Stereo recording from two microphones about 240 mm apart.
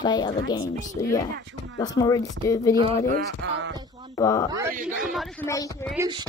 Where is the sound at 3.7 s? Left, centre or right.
Centre.